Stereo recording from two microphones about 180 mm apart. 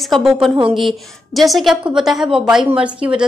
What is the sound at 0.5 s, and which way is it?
Speech, 25° right (ahead or behind).